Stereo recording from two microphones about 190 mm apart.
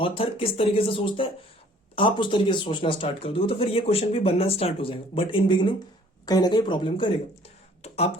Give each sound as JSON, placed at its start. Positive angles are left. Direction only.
{"t": 0.0, "sound": "speech", "side_deg": 30}